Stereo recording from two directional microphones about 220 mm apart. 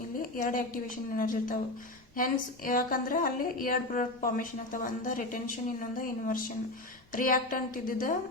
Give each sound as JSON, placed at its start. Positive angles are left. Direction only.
{"t": 0.2, "sound": "a woman's voice", "side_deg": 40}